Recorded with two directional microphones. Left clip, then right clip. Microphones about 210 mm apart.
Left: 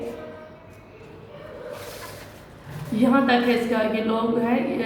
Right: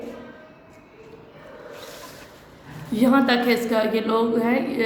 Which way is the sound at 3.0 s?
50° right (ahead or behind).